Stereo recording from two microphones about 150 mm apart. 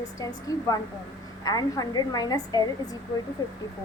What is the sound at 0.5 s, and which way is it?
A woman's voice, 25° left (ahead or behind).